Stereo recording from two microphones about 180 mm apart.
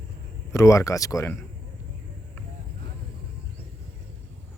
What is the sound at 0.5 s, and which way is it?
Speech, 15° left (ahead or behind).